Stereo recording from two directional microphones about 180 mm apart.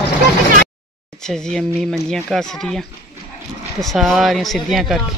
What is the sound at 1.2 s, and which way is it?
Speech, 5° left (ahead or behind).